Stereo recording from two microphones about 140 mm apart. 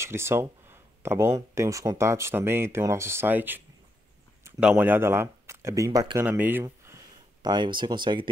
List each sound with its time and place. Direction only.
0.0 s speech: 20° right (ahead or behind)
5.9 s speech: 35° right (ahead or behind)
6.1 s speech: 15° right (ahead or behind)
7.4 s speech: 30° right (ahead or behind)